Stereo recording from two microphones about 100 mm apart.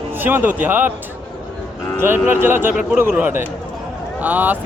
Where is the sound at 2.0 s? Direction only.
20° right (ahead or behind).